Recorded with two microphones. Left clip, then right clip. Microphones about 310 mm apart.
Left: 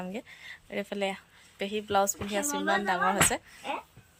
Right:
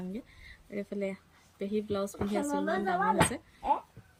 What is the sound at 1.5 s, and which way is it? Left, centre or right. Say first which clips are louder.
Speech: left 1 dB; left.